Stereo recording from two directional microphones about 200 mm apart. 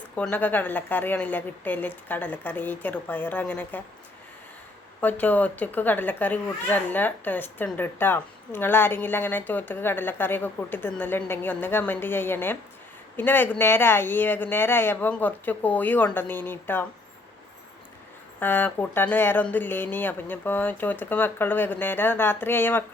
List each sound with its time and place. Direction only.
0.2 s speech: 10° left (ahead or behind)
4.9 s speech: 10° left (ahead or behind)
18.3 s speech: 10° left (ahead or behind)